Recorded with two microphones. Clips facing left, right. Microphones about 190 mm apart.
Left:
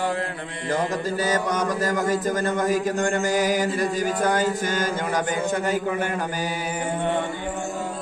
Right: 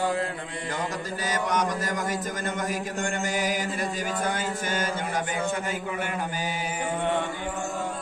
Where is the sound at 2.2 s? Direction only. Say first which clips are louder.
Left 8 dB; 35° left (ahead or behind).